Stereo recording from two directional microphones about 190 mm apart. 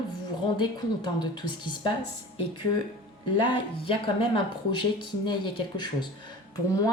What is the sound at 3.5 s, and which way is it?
Speech, 25° left (ahead or behind).